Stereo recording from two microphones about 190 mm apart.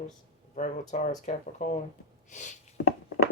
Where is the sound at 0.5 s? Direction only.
40° left (ahead or behind).